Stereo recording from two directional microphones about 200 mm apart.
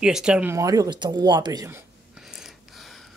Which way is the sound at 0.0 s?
5° right (ahead or behind).